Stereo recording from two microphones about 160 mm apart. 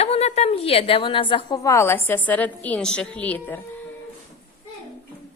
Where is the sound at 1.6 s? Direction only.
15° left (ahead or behind).